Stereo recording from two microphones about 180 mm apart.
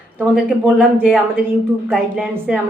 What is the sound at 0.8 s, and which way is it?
Speech, 5° right (ahead or behind).